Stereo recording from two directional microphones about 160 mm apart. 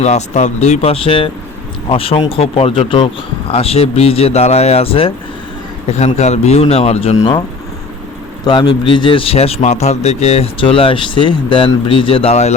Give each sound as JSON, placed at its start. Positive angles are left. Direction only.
{"t": 0.0, "sound": "a man's voice", "side_deg": 45}
{"t": 6.1, "sound": "a man's voice", "side_deg": 45}
{"t": 8.4, "sound": "a man's voice", "side_deg": 30}